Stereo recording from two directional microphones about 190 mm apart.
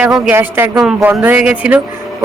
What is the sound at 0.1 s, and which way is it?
Speech, 10° right (ahead or behind).